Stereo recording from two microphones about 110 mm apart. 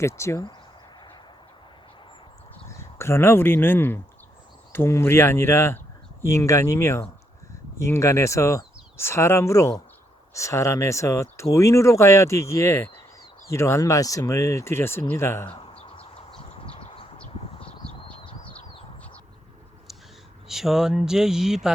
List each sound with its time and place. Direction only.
0.0 s speech: 25° left (ahead or behind)
2.6 s speech: 25° left (ahead or behind)
15.4 s a sound: 50° left (ahead or behind)
17.8 s horse: 5° left (ahead or behind)
20.5 s speech: 5° right (ahead or behind)